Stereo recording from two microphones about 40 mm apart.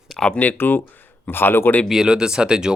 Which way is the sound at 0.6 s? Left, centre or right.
Left.